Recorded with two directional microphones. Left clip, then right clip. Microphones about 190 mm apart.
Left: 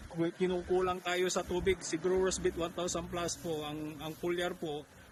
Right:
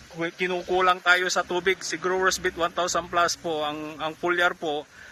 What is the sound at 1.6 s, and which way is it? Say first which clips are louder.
Speech: right 7 dB; 5° left (ahead or behind).